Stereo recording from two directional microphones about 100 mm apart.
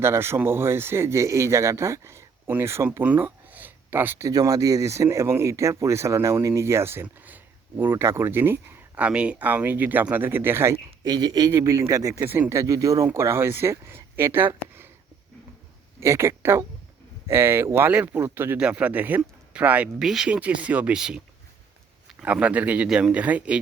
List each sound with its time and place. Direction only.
0.0 s speech: 25° right (ahead or behind)
3.0 s a sound: 15° right (ahead or behind)
4.3 s speech: 35° right (ahead or behind)
11.0 s speech: 45° right (ahead or behind)
12.2 s speech: 20° right (ahead or behind)
16.0 s speech: 25° right (ahead or behind)
20.0 s speech: 5° right (ahead or behind)
22.2 s speech: 15° right (ahead or behind)